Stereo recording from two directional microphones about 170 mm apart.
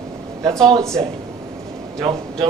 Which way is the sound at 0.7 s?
20° right (ahead or behind).